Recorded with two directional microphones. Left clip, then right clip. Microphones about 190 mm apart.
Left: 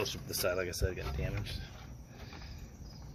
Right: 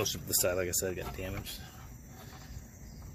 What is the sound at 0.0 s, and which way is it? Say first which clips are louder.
Speech: right 3 dB; 55° right (ahead or behind).